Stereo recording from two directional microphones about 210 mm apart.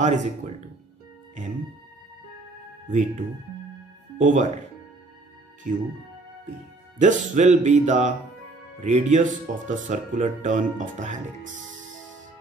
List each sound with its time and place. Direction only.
0.4 s speech: 40° right (ahead or behind)
2.9 s speech: 35° right (ahead or behind)
5.7 s speech: 35° right (ahead or behind)
7.0 s speech: 35° right (ahead or behind)